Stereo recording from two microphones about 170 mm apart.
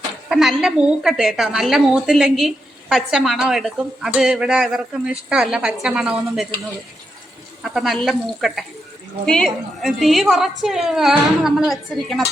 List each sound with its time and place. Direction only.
0.3 s a woman's voice: centre (ahead or behind)
7.6 s a woman's voice: centre (ahead or behind)